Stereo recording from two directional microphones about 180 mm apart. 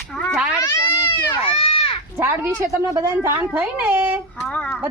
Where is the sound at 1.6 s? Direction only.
30° left (ahead or behind).